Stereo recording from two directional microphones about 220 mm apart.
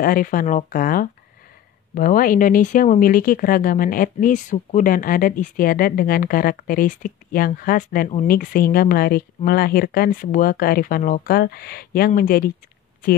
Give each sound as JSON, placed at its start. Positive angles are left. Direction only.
{"t": 0.0, "sound": "speech", "side_deg": 40}